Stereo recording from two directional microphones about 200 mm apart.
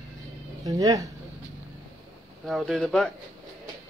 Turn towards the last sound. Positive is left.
turn(degrees=0)  # may be behind; listen again after turning